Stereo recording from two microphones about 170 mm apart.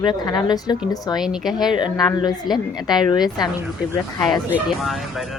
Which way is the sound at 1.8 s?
25° left (ahead or behind).